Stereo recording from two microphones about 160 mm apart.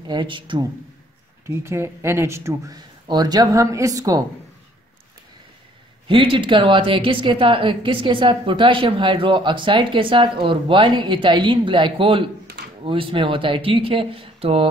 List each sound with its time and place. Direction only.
0.0 s speech: 30° right (ahead or behind)
1.4 s speech: 15° right (ahead or behind)
6.0 s speech: 30° right (ahead or behind)